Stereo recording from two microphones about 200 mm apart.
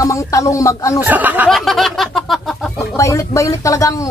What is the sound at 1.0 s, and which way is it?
A man's voice, 10° right (ahead or behind).